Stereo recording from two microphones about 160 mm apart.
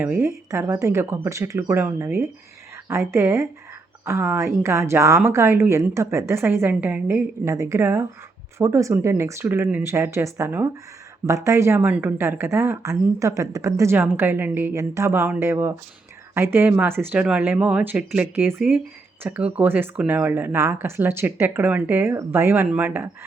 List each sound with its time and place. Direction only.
0.0 s a woman's voice: 15° right (ahead or behind)